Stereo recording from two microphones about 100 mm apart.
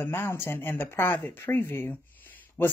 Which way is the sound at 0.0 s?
25° left (ahead or behind).